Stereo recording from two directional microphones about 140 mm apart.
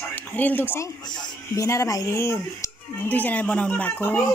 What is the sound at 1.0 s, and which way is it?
Speech, 30° left (ahead or behind).